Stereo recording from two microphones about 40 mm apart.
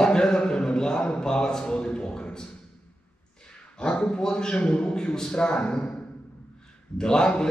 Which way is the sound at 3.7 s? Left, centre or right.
Left.